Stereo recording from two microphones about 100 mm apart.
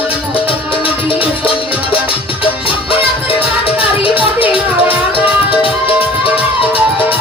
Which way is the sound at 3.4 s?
65° left (ahead or behind).